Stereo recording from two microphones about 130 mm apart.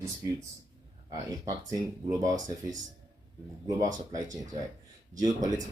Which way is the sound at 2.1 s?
30° right (ahead or behind).